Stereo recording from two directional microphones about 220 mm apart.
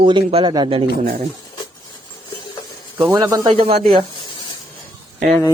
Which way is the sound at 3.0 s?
10° right (ahead or behind).